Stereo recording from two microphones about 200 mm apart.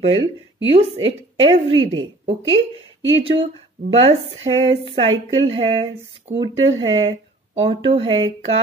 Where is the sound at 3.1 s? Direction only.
25° right (ahead or behind).